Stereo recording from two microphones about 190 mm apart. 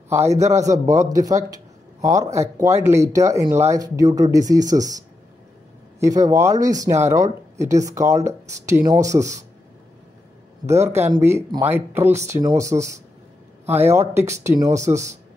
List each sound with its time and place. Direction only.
0.1 s speech: 15° right (ahead or behind)
0.4 s a man's voice: 35° right (ahead or behind)
0.7 s a man's voice: 20° right (ahead or behind)
5.9 s speech: 15° right (ahead or behind)
10.7 s speech: 15° right (ahead or behind)
13.7 s speech: 15° right (ahead or behind)